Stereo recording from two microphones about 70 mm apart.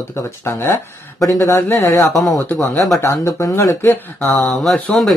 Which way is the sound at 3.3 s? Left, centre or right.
Left.